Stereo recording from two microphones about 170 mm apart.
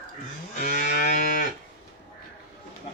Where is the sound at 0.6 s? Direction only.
50° left (ahead or behind).